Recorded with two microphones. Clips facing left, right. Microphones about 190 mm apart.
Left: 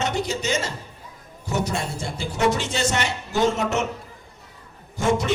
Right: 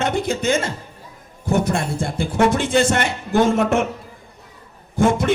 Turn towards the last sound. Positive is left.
turn(degrees=-55)  # may be behind; listen again after turning